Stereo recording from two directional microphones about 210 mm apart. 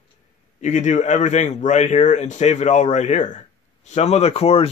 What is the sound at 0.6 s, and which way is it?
A man's voice, 35° left (ahead or behind).